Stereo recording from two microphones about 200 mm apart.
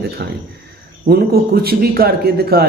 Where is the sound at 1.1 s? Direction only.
50° right (ahead or behind).